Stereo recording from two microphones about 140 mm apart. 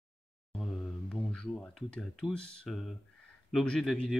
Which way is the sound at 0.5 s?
5° left (ahead or behind).